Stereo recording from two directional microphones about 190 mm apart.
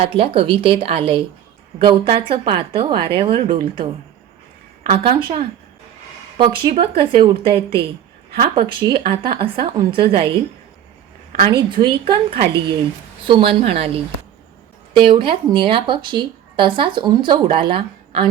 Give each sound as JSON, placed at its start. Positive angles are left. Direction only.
{"t": 0.0, "sound": "speech", "side_deg": -30}
{"t": 4.9, "sound": "speech", "side_deg": -30}
{"t": 11.7, "sound": "speech", "side_deg": -25}